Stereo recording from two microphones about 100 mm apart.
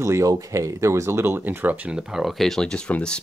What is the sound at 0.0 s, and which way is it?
Speech, 30° right (ahead or behind).